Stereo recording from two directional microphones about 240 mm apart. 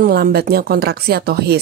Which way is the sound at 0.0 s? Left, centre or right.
Right.